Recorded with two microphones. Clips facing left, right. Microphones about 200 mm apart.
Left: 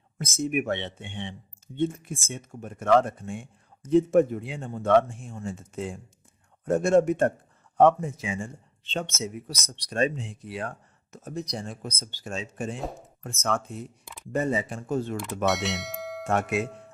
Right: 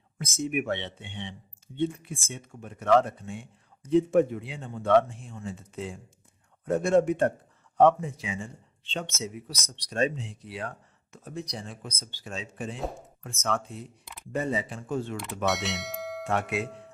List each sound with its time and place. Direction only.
0.2 s speech: 45° left (ahead or behind)
14.0 s a sound: centre (ahead or behind)
14.3 s speech: 45° left (ahead or behind)
15.4 s speech: centre (ahead or behind)
16.2 s speech: 45° left (ahead or behind)